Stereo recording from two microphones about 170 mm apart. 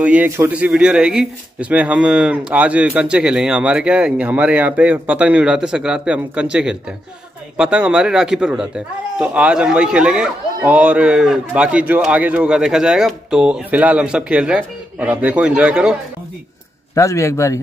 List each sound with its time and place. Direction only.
0.0 s speech: 10° right (ahead or behind)
16.9 s speech: 20° left (ahead or behind)